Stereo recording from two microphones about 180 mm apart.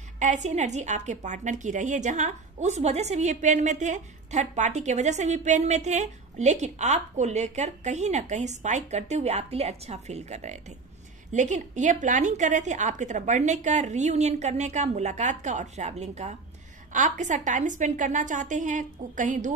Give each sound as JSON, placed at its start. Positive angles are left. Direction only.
{"t": 0.2, "sound": "a woman's voice", "side_deg": -40}